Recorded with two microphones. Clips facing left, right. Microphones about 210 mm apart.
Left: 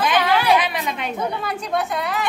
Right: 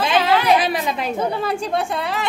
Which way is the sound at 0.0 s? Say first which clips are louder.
Right 1 dB; 30° right (ahead or behind).